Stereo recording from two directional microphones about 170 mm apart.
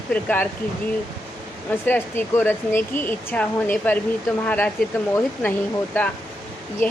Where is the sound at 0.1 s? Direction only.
10° left (ahead or behind).